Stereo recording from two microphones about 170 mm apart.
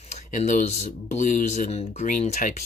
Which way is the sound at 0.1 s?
50° left (ahead or behind).